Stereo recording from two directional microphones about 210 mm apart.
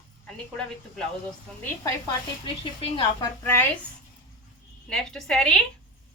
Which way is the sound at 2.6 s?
25° left (ahead or behind).